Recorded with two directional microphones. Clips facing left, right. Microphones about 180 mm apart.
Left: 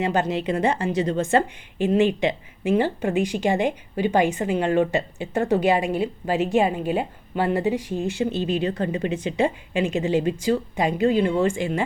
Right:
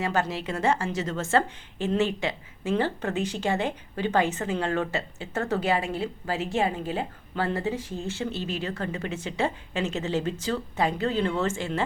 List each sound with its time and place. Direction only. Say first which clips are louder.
0.0 s a woman's voice: left 5 dB; 20° left (ahead or behind)